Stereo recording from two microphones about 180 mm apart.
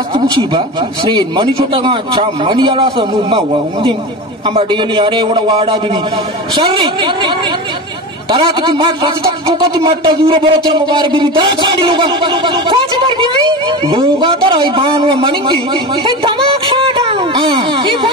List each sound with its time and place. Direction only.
0.1 s speech: 25° right (ahead or behind)